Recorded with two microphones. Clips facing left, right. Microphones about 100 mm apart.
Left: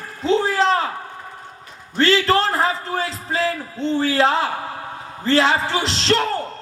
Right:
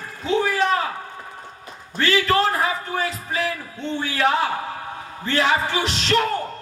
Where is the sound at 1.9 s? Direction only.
30° left (ahead or behind).